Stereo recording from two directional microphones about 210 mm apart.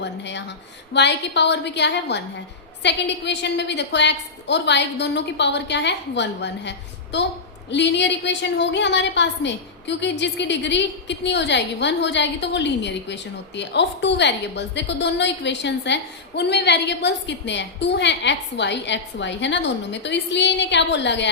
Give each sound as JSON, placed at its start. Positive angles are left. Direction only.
{"t": 0.0, "sound": "a woman's voice", "side_deg": 55}